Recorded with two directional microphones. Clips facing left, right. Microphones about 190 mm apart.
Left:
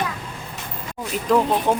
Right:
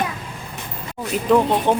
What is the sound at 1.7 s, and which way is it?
Chicken, 5° left (ahead or behind).